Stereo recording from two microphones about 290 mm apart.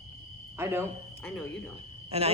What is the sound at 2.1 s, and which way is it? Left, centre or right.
Speech, right.